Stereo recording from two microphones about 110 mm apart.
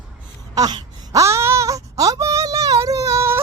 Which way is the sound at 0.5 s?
35° right (ahead or behind).